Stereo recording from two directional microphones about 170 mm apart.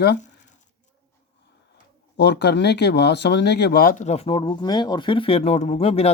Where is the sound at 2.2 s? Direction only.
80° left; by 4.0 s 60° left (ahead or behind).